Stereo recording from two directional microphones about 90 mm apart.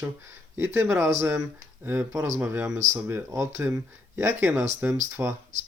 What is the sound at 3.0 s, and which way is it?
Speech, 30° right (ahead or behind).